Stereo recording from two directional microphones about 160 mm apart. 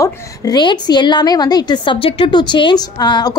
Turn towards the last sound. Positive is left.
turn(degrees=25)  # may be behind; listen again after turning